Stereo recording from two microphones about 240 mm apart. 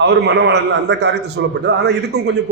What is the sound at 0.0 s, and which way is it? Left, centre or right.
A man's voice, right.